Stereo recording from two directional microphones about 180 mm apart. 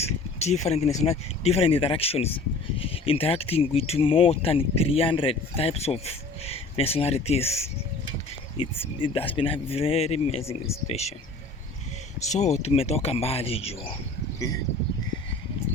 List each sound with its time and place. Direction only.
0.0 s speech: 35° left (ahead or behind)
12.2 s speech: 40° left (ahead or behind)
14.3 s speech: 20° left (ahead or behind)